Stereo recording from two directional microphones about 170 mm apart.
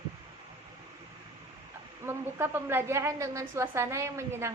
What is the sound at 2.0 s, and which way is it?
A woman's voice, 15° right (ahead or behind).